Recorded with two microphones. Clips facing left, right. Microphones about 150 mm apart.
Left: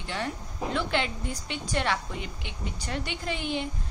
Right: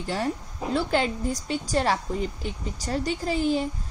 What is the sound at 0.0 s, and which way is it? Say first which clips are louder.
A woman's voice: right 5 dB; 40° right (ahead or behind).